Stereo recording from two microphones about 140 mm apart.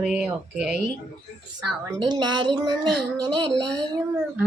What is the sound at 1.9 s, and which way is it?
A woman's voice, 30° right (ahead or behind).